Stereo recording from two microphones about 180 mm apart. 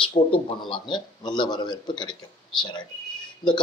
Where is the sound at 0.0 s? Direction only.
30° left (ahead or behind).